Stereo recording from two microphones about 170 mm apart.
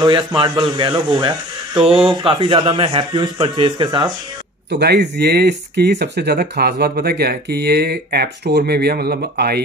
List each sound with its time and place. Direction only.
0.0 s speech: 30° right (ahead or behind)
4.6 s speech: 85° right; by 9.6 s 65° right (ahead or behind)